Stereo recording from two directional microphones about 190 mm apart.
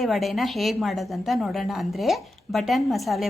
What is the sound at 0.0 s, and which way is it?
A woman's voice, centre (ahead or behind).